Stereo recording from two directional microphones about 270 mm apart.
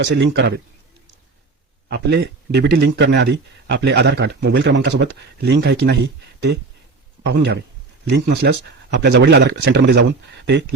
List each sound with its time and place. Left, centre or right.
0.0 s speech: right
1.9 s speech: right
7.3 s speech: right